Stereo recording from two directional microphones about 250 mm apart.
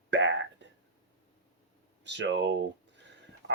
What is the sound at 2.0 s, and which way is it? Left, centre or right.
Speech, right.